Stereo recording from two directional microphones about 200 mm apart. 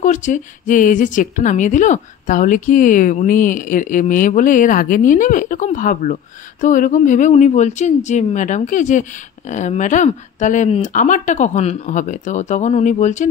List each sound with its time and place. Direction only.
0.0 s a woman's voice: 40° left (ahead or behind)